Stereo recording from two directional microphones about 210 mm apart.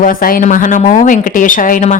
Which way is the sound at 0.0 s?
40° left (ahead or behind).